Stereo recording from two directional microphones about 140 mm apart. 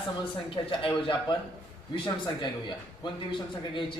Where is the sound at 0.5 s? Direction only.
40° left (ahead or behind).